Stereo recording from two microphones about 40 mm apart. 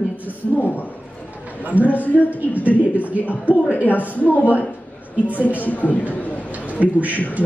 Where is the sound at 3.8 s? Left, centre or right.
Left.